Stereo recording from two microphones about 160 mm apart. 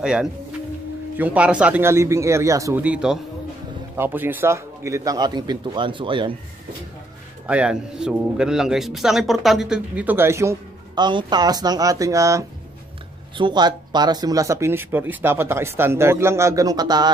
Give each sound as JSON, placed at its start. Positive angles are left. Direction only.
{"t": 0.0, "sound": "speech", "side_deg": -5}
{"t": 2.8, "sound": "a man's voice", "side_deg": -5}
{"t": 7.4, "sound": "speech", "side_deg": -5}
{"t": 11.1, "sound": "a man's voice", "side_deg": -25}